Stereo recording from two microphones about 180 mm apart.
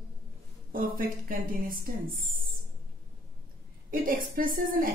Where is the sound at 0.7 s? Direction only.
50° right (ahead or behind).